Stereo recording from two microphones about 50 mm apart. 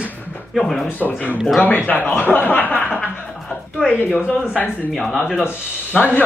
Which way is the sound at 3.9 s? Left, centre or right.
Left.